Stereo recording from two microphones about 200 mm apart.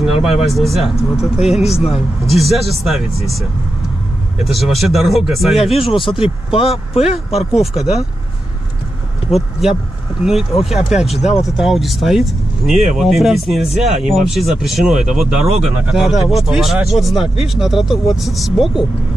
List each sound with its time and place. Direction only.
0.5 s speech: centre (ahead or behind)
4.5 s speech: centre (ahead or behind)
5.8 s speech: 25° left (ahead or behind)
7.6 s speech: centre (ahead or behind)
9.3 s speech: centre (ahead or behind)